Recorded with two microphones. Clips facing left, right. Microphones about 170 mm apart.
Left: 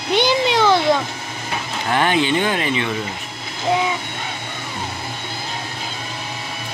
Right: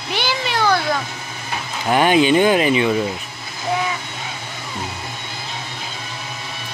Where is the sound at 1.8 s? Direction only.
15° right (ahead or behind).